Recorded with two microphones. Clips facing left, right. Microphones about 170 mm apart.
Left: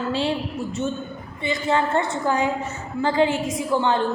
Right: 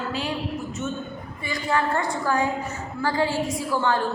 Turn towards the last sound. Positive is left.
turn(degrees=20)  # may be behind; listen again after turning